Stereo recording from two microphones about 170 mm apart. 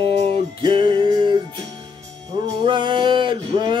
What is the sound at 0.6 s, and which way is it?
Music, 30° right (ahead or behind).